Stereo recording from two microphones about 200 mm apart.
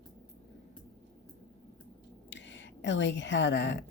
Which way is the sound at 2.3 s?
65° left (ahead or behind).